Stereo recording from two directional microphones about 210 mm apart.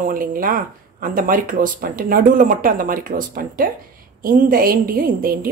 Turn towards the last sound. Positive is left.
turn(degrees=-45)  # may be behind; listen again after turning